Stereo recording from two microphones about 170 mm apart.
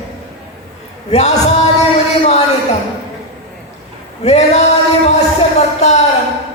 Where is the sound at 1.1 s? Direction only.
40° left (ahead or behind).